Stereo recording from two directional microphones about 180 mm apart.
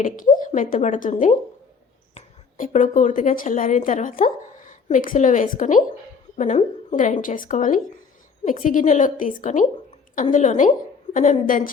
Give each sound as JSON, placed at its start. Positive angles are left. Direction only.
{"t": 0.0, "sound": "a woman's voice", "side_deg": 50}
{"t": 2.1, "sound": "a woman's voice", "side_deg": 45}